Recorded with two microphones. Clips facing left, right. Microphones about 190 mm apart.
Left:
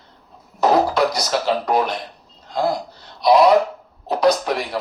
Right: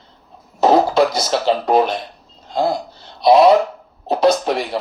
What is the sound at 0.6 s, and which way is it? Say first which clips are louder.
Speech: right 3 dB; 25° right (ahead or behind).